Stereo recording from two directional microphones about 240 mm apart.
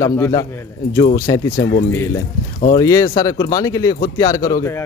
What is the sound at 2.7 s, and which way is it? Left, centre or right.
Speech, centre.